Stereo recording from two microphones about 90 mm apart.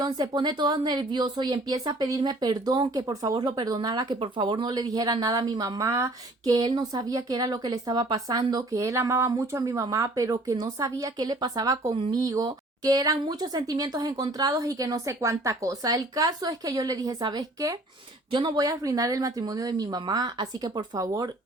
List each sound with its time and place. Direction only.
0.0 s speech: 50° right (ahead or behind)
3.3 s speech: 50° right (ahead or behind)
18.3 s speech: 60° right (ahead or behind)
18.5 s speech: 40° right (ahead or behind)